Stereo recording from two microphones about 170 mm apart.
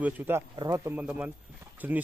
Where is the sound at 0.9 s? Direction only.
10° right (ahead or behind).